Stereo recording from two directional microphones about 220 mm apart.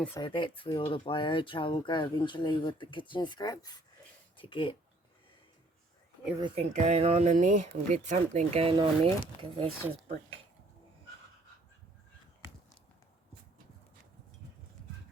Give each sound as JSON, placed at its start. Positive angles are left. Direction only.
{"t": 0.2, "sound": "speech", "side_deg": 20}
{"t": 6.4, "sound": "speech", "side_deg": -30}